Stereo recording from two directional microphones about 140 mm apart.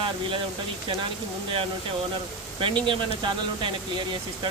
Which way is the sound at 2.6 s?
35° right (ahead or behind).